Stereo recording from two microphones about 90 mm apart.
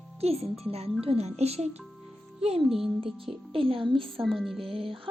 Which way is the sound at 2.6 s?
Centre (ahead or behind).